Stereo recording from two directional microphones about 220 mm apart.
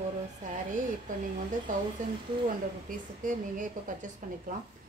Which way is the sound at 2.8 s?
35° right (ahead or behind).